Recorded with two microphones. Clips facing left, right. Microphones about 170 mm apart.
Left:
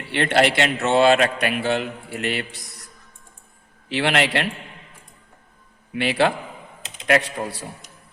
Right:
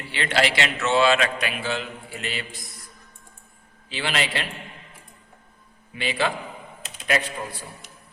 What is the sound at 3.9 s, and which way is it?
Speech, 65° left (ahead or behind).